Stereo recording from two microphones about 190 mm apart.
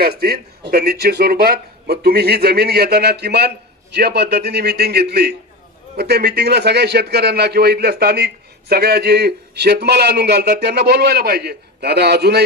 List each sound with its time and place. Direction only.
0.0 s a man's voice: 55° right (ahead or behind)